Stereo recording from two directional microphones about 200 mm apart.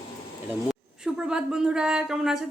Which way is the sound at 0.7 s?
5° right (ahead or behind).